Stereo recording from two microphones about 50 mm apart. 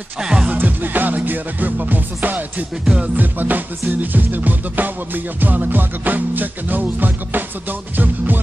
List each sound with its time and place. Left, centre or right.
0.2 s music: centre
0.5 s music: right